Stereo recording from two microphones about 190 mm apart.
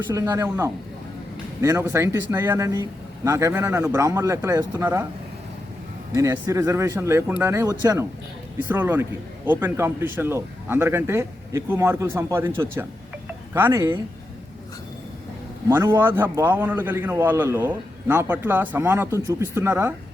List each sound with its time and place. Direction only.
0.1 s a man's voice: 15° right (ahead or behind)
6.1 s a man's voice: 15° right (ahead or behind)
13.5 s a man's voice: 15° right (ahead or behind)
15.7 s a man's voice: 15° right (ahead or behind)